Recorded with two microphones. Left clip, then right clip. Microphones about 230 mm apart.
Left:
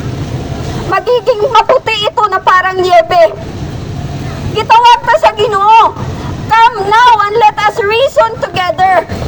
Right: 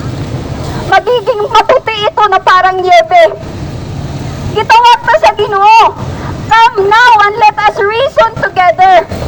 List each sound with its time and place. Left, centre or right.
1.0 s speech: right
4.7 s speech: right